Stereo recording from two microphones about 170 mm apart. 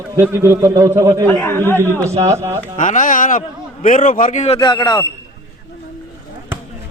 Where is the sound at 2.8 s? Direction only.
50° left (ahead or behind).